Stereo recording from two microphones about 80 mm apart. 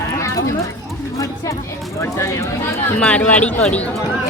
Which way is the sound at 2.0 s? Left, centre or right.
Left.